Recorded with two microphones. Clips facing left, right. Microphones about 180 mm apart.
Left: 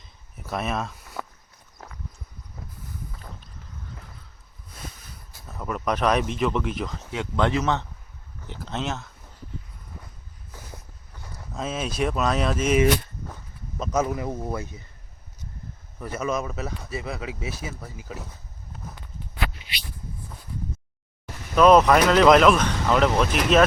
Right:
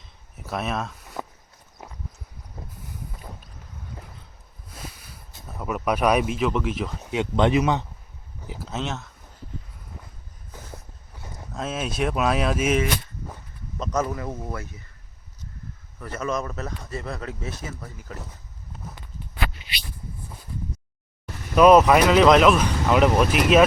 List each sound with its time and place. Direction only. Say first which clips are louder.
0.0 s a sound: right 1 dB; centre (ahead or behind)
5.5 s speech: right 2 dB; 10° right (ahead or behind)
11.5 s speech: even; centre (ahead or behind)
13.7 s speech: left 1 dB; 5° left (ahead or behind)
16.0 s speech: left 1 dB; 10° left (ahead or behind)
21.5 s speech: right 1 dB; 5° right (ahead or behind)